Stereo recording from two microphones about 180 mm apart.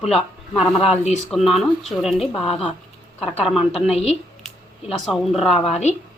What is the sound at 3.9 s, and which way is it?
Speech, 35° left (ahead or behind).